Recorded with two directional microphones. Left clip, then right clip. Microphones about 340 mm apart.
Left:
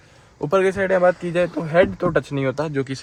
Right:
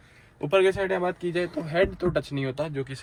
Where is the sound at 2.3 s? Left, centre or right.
Left.